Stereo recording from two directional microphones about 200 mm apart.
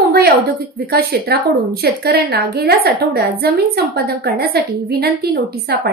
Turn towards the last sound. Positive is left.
turn(degrees=-50)  # may be behind; listen again after turning